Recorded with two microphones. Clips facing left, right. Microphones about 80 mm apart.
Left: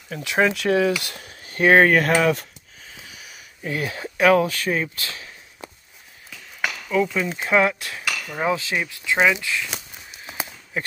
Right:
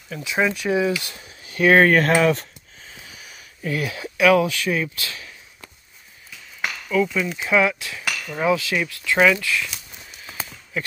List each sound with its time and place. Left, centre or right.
0.1 s speech: left
1.6 s speech: left
1.9 s speech: centre
3.2 s a sound: centre
3.7 s speech: left
6.9 s speech: left
8.4 s speech: left
10.4 s a sound: centre